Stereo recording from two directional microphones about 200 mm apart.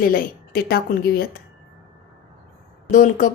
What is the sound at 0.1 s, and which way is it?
Speech, 50° left (ahead or behind).